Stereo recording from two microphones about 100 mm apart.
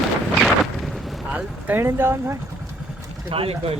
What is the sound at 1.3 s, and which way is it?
Speech, 15° right (ahead or behind).